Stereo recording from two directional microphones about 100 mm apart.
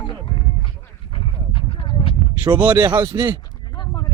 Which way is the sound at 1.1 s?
55° left (ahead or behind).